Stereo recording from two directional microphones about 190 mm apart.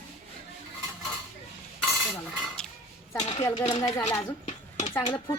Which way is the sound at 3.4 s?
20° left (ahead or behind).